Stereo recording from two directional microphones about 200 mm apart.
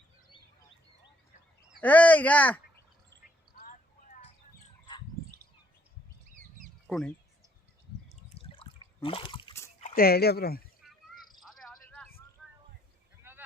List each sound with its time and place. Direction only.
1.8 s speech: 5° left (ahead or behind)
3.5 s a sound: 45° left (ahead or behind)
6.8 s speech: centre (ahead or behind)
8.1 s water: 30° left (ahead or behind)
9.9 s speech: 50° left (ahead or behind)
10.8 s a sound: centre (ahead or behind)
13.2 s boat: 10° right (ahead or behind)